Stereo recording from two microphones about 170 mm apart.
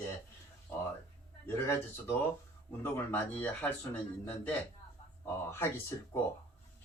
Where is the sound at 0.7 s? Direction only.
10° left (ahead or behind).